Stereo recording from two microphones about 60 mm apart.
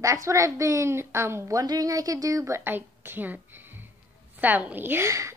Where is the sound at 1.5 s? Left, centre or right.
Right.